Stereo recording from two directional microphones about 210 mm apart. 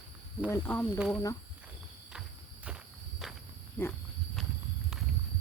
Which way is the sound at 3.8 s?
5° left (ahead or behind).